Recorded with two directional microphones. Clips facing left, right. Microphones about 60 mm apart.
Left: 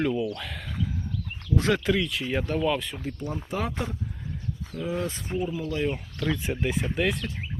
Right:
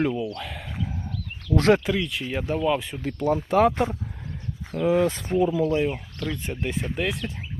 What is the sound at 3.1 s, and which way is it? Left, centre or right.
Speech, right.